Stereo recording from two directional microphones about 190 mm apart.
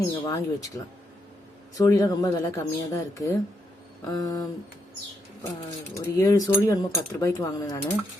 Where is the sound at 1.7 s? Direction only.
20° left (ahead or behind).